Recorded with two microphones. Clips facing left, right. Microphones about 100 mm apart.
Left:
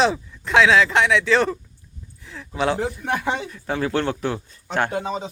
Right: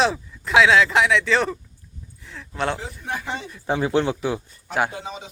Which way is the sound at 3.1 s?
85° left.